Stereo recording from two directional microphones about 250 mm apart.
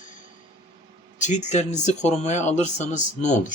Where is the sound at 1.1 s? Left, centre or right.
Left.